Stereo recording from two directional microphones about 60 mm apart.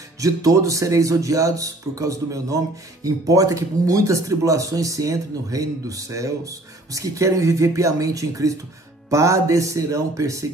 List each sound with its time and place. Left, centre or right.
0.2 s speech: right
9.1 s speech: right